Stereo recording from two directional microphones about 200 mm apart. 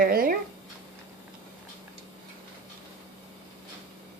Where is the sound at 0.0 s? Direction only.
45° right (ahead or behind).